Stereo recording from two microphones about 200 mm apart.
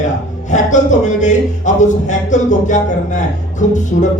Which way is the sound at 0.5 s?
40° left (ahead or behind).